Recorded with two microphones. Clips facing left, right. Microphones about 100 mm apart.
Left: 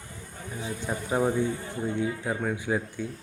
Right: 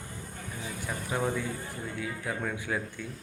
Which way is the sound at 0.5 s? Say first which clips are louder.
Left 5 dB; 25° left (ahead or behind).